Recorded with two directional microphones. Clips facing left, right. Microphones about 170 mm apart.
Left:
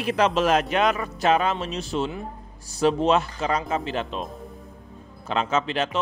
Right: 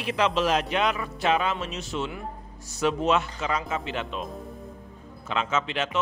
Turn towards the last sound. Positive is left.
turn(degrees=35)  # may be behind; listen again after turning